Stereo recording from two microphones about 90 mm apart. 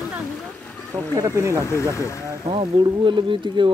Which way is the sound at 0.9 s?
35° right (ahead or behind).